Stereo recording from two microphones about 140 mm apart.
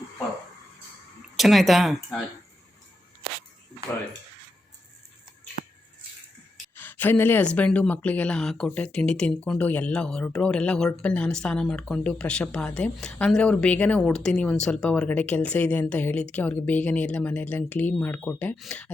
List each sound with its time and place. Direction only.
1.4 s speech: centre (ahead or behind)
5.6 s a sound: 90° left
6.7 s speech: 15° left (ahead or behind)